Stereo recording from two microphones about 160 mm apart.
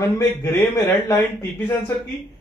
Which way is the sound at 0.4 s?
20° left (ahead or behind).